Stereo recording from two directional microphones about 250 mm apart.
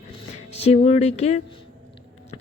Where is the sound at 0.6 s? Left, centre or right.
Left.